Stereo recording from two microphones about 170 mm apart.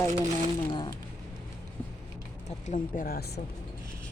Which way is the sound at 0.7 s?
25° left (ahead or behind).